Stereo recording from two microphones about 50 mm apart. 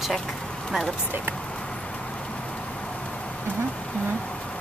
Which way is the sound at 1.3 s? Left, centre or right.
Left.